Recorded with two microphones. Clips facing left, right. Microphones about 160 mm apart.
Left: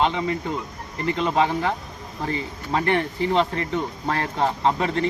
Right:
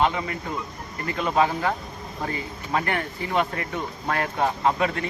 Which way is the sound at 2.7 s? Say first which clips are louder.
Left 4 dB; 25° left (ahead or behind).